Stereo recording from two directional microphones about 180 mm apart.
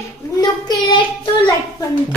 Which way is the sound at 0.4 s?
25° left (ahead or behind).